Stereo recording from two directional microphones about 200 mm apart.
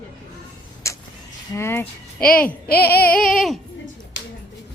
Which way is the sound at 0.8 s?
15° left (ahead or behind).